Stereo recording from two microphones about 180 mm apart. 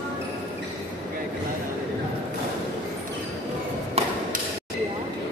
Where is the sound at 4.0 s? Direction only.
35° right (ahead or behind).